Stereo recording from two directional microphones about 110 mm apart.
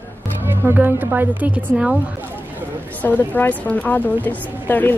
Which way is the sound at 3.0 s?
15° left (ahead or behind).